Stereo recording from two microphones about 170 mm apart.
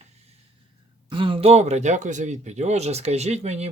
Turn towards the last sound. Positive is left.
turn(degrees=-40)  # may be behind; listen again after turning